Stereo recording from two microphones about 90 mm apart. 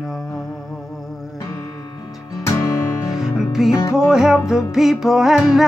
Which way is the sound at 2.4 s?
35° left (ahead or behind).